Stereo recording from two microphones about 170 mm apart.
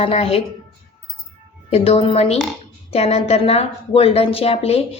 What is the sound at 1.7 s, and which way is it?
A woman's voice, 35° left (ahead or behind).